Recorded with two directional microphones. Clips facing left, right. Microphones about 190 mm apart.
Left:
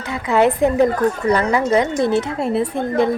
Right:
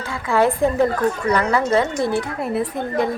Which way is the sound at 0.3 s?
20° left (ahead or behind).